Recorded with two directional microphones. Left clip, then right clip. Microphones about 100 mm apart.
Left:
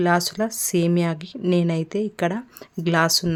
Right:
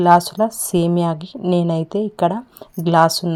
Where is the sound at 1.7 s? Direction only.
15° right (ahead or behind).